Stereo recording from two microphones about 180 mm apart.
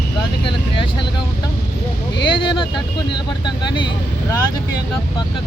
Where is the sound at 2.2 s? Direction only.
25° left (ahead or behind).